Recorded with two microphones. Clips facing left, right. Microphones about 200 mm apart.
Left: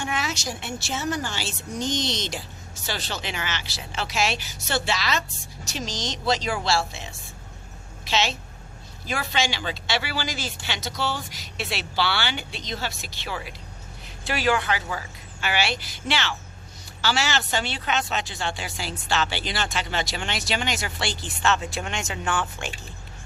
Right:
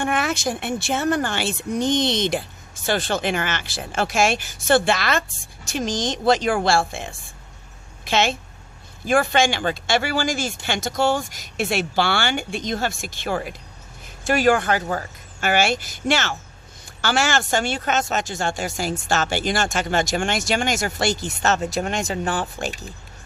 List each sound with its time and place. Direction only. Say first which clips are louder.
0.0 s a woman's voice: right 7 dB; 55° right (ahead or behind); by 22.9 s 35° right (ahead or behind)